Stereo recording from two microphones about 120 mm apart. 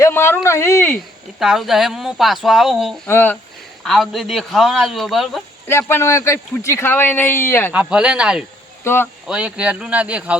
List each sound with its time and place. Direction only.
0.0 s a sound: 20° left (ahead or behind)
1.4 s speech: centre (ahead or behind)
3.1 s speech: 15° left (ahead or behind)
3.8 s speech: centre (ahead or behind)
5.6 s a man's voice: 20° left (ahead or behind)
7.7 s speech: 10° right (ahead or behind)
8.8 s speech: 20° left (ahead or behind)
9.2 s speech: 10° right (ahead or behind)